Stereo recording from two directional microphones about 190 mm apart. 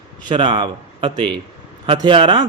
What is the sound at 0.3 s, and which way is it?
Speech, 25° right (ahead or behind).